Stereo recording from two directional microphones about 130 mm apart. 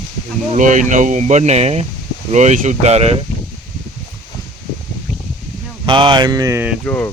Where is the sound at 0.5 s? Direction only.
75° right (ahead or behind); by 3.2 s 55° right (ahead or behind).